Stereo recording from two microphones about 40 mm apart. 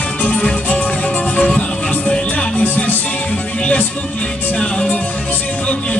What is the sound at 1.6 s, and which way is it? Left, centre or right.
Music, left.